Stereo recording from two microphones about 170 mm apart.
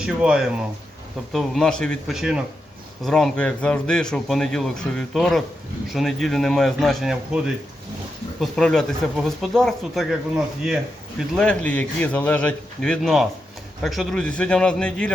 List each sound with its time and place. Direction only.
0.0 s a man's voice: 5° right (ahead or behind)
11.3 s a man's voice: 5° left (ahead or behind)